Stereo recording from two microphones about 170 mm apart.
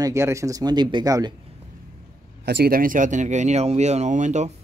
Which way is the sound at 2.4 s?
70° right (ahead or behind).